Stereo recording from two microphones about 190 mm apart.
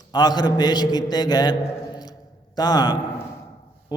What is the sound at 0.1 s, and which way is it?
A man's voice, 20° left (ahead or behind).